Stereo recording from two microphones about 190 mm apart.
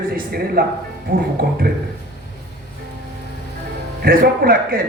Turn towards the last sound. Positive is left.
turn(degrees=-50)  # may be behind; listen again after turning